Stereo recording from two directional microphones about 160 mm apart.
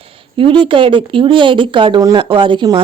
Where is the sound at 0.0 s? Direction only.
35° right (ahead or behind).